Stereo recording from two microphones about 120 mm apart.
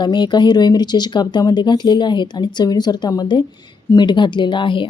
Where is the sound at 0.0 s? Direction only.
40° left (ahead or behind).